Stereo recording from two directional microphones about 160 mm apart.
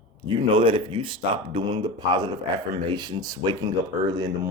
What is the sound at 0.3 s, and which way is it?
Speech, 30° right (ahead or behind).